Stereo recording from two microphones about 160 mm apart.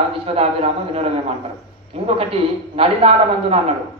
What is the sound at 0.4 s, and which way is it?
A man's voice, 40° right (ahead or behind).